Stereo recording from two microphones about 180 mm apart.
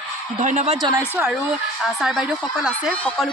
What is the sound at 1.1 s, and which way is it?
Speech, 5° right (ahead or behind).